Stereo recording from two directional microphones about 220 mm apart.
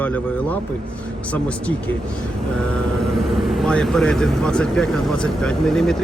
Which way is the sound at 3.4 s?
Centre (ahead or behind).